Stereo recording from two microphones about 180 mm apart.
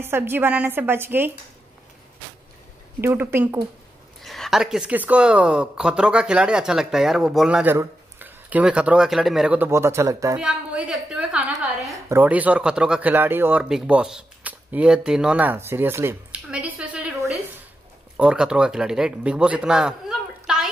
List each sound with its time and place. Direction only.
0.0 s a woman's voice: 10° right (ahead or behind)
3.0 s a woman's voice: 15° right (ahead or behind)
4.2 s speech: centre (ahead or behind); by 10.3 s 15° right (ahead or behind)
10.3 s speech: 5° right (ahead or behind)